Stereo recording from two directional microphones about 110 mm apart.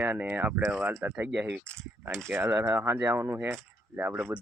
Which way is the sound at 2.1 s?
25° right (ahead or behind).